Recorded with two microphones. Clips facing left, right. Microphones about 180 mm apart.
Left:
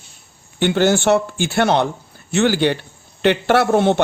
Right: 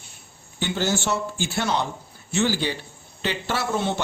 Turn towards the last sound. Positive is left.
turn(degrees=65)  # may be behind; listen again after turning